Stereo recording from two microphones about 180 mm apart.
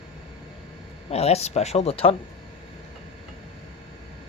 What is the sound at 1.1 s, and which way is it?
Speech, 35° left (ahead or behind).